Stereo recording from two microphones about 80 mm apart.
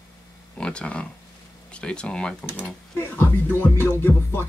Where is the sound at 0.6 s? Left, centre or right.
Centre.